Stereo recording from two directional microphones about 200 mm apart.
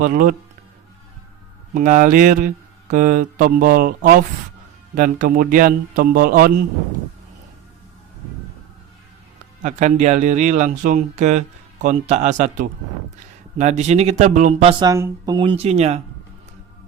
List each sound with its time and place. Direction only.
0.0 s a man's voice: 45° right (ahead or behind)
1.7 s a man's voice: 40° right (ahead or behind)
9.6 s speech: 35° right (ahead or behind)
14.8 s speech: 15° right (ahead or behind)
15.4 s speech: 30° right (ahead or behind)